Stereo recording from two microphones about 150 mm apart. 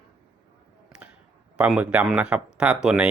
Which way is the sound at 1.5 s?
10° right (ahead or behind).